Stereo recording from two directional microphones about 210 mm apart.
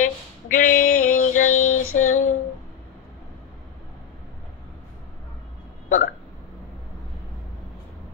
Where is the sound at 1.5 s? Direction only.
90° left.